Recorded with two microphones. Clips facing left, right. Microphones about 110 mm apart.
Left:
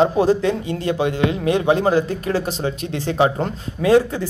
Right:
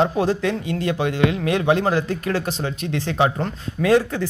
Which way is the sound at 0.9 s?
5° left (ahead or behind).